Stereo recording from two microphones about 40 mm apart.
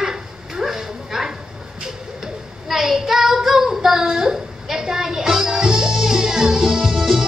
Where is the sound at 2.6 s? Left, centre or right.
Centre.